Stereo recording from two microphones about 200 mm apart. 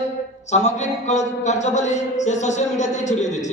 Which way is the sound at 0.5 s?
35° left (ahead or behind).